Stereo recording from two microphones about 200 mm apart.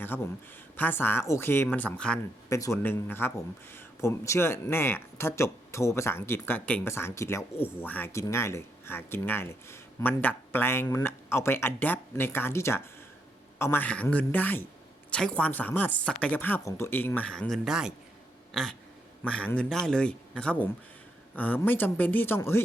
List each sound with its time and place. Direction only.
0.0 s speech: 10° left (ahead or behind)
18.5 s a sound: centre (ahead or behind)
19.2 s speech: 5° left (ahead or behind)